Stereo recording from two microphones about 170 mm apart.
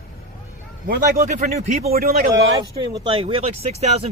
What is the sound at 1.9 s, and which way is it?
Speech, 60° right (ahead or behind).